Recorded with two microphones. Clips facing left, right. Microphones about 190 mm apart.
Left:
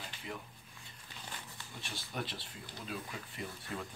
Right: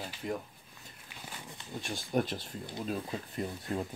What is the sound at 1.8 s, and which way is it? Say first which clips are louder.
Speech: right 11 dB; 45° right (ahead or behind).